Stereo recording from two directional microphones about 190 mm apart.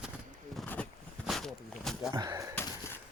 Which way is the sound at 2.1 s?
20° right (ahead or behind).